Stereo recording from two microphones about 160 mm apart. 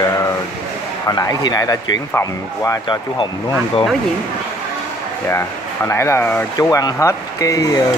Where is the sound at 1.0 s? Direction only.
20° left (ahead or behind).